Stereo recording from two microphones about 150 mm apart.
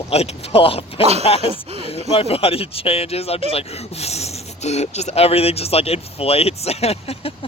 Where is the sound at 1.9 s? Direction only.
40° left (ahead or behind).